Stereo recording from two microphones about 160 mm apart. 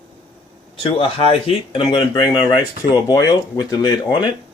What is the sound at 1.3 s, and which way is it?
Speech, 35° left (ahead or behind).